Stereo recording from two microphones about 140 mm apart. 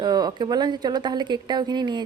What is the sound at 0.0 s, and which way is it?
A woman's voice, 30° right (ahead or behind).